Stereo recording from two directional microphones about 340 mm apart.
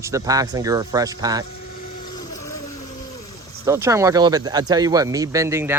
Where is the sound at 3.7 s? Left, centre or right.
Centre.